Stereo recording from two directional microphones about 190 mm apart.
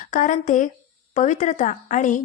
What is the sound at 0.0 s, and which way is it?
Speech, 40° left (ahead or behind).